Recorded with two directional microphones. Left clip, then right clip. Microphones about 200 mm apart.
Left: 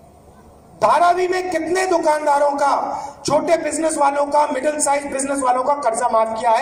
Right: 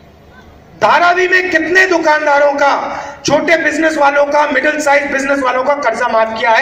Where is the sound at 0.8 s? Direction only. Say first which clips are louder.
Right 5 dB; 35° right (ahead or behind).